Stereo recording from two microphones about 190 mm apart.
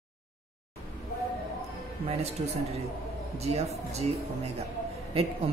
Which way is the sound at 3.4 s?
35° right (ahead or behind).